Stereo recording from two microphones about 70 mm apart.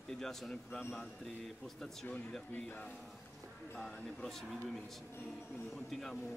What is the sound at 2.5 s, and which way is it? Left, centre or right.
Speech, left.